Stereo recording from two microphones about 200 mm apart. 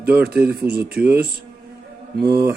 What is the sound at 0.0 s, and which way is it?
Mantra, 50° right (ahead or behind).